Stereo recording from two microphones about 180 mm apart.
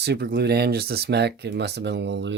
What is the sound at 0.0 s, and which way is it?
Speech, 65° right (ahead or behind).